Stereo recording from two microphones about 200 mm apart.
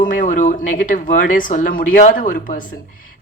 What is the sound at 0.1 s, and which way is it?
A woman's voice, 40° left (ahead or behind).